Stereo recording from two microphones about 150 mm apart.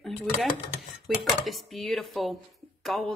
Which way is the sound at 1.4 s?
Centre (ahead or behind).